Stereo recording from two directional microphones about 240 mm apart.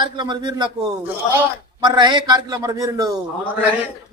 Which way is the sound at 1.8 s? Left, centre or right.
Centre.